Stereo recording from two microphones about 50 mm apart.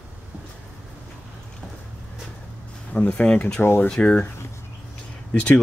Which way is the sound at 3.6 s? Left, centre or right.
Left.